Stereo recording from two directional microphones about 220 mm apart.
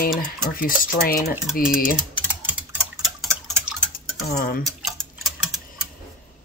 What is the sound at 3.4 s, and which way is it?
Tick-tock, centre (ahead or behind).